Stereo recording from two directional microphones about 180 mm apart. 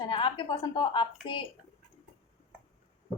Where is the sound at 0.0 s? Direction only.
25° left (ahead or behind).